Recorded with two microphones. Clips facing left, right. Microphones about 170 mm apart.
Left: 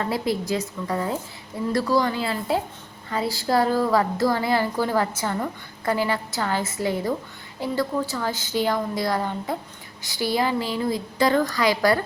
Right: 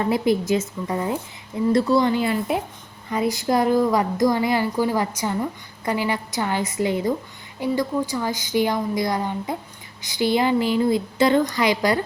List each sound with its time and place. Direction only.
0.0 s a woman's voice: 20° right (ahead or behind)